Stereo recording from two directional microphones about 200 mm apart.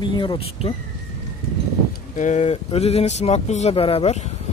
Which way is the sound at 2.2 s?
35° left (ahead or behind).